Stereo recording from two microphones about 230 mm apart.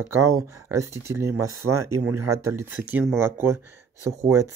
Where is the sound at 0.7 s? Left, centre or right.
Centre.